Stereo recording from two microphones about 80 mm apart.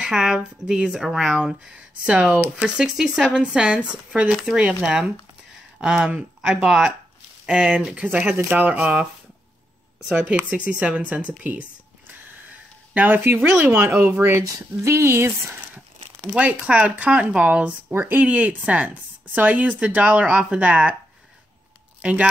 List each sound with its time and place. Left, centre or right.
0.0 s speech: centre
10.1 s speech: centre
16.3 s speech: centre
22.0 s speech: centre